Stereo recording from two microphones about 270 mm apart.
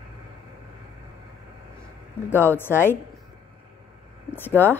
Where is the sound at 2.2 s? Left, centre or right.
Centre.